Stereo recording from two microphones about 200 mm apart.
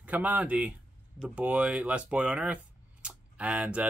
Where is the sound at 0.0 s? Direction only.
5° right (ahead or behind).